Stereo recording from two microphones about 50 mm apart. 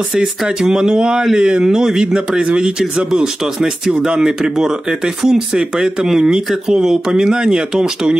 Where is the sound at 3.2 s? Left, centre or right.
Centre.